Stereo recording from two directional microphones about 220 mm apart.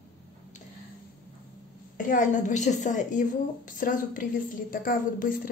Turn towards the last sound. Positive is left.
turn(degrees=40)  # may be behind; listen again after turning